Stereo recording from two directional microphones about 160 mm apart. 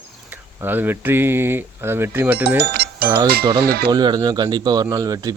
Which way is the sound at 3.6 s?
80° right.